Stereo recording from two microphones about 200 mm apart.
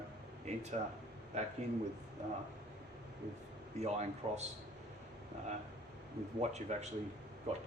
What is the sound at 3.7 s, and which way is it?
Speech, 35° right (ahead or behind).